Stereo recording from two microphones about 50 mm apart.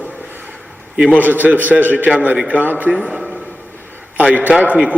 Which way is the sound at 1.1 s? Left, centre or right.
Right.